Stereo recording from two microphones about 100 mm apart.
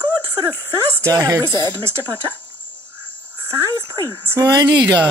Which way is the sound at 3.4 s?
30° right (ahead or behind).